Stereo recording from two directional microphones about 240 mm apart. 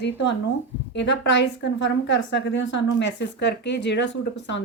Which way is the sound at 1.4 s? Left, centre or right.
Left.